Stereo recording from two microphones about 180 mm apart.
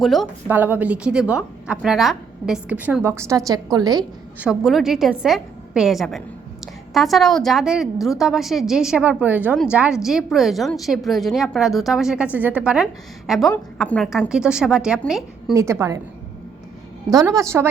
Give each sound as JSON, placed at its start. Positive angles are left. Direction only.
{"t": 0.0, "sound": "a woman's voice", "side_deg": 0}
{"t": 0.4, "sound": "a woman's voice", "side_deg": -10}
{"t": 4.4, "sound": "a woman's voice", "side_deg": -5}
{"t": 15.5, "sound": "a woman's voice", "side_deg": -15}
{"t": 17.1, "sound": "a woman's voice", "side_deg": -20}